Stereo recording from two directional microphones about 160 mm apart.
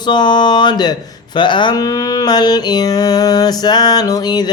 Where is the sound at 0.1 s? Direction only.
30° left (ahead or behind).